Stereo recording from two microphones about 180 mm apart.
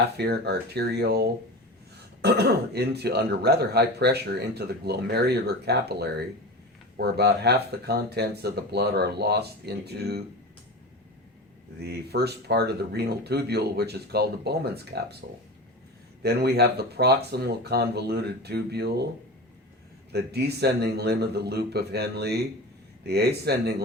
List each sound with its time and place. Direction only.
0.2 s speech: 65° right (ahead or behind)
11.8 s speech: 65° right (ahead or behind)
16.2 s speech: 65° right (ahead or behind)
20.1 s speech: 65° right (ahead or behind)